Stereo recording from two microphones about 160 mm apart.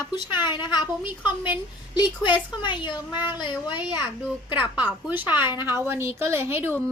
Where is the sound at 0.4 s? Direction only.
30° left (ahead or behind).